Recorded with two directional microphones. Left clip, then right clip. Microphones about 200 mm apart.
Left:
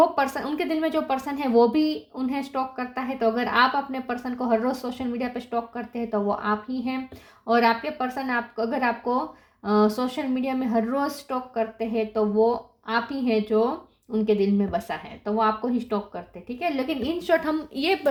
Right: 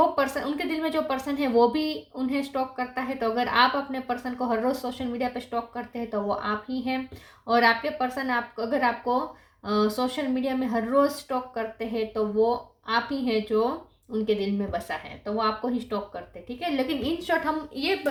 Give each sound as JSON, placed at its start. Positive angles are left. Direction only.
{"t": 0.0, "sound": "speech", "side_deg": 35}